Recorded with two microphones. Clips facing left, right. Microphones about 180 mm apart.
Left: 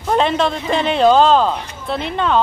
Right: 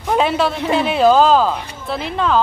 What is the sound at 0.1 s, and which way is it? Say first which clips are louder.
A man's voice: even; 5° right (ahead or behind).